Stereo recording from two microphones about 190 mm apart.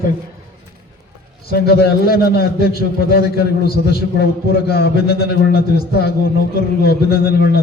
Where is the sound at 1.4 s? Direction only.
55° left (ahead or behind).